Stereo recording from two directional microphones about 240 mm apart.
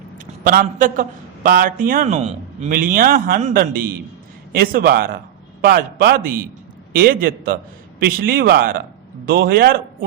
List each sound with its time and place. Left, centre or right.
0.4 s a man's voice: right